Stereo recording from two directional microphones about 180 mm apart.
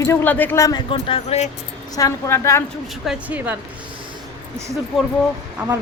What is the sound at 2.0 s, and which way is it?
Speech, 20° left (ahead or behind).